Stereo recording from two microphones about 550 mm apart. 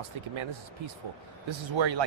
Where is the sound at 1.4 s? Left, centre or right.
Right.